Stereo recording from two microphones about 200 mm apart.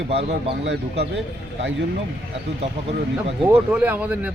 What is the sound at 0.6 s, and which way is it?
Speech, 65° right (ahead or behind).